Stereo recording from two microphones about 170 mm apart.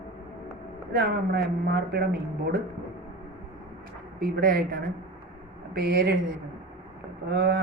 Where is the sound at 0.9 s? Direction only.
70° right (ahead or behind).